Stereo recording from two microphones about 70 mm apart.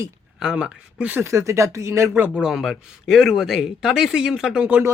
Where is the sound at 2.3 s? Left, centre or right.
Centre.